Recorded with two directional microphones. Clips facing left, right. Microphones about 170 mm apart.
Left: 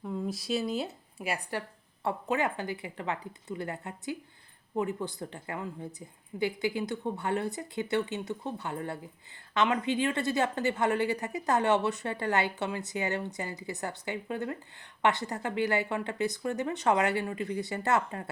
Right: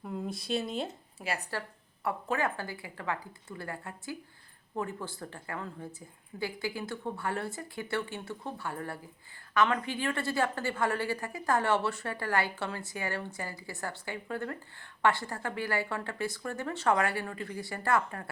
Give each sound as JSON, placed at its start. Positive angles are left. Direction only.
{"t": 0.3, "sound": "speech", "side_deg": 0}
{"t": 1.2, "sound": "a woman's voice", "side_deg": 15}